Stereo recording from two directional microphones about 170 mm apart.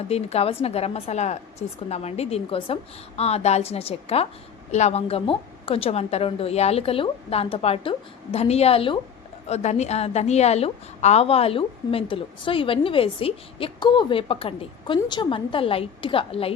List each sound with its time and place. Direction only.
0.1 s a woman's voice: 35° left (ahead or behind)